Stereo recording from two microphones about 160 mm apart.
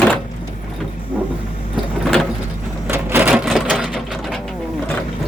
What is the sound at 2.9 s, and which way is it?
Sewing machine, 10° right (ahead or behind).